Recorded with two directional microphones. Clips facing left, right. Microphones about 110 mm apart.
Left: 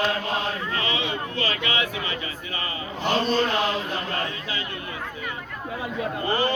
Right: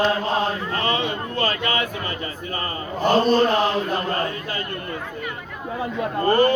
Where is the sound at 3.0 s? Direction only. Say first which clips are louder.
Right 6 dB; 45° right (ahead or behind).